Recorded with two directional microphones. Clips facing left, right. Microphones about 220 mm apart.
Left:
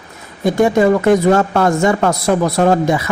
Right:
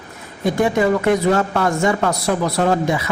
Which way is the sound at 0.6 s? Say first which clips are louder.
Left 5 dB; 45° left (ahead or behind).